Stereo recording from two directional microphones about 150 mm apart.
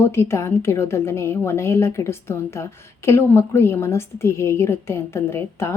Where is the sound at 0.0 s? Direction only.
15° left (ahead or behind).